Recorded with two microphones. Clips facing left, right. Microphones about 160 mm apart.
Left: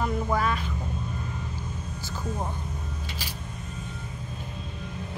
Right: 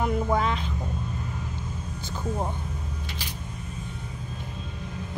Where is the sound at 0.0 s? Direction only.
20° right (ahead or behind).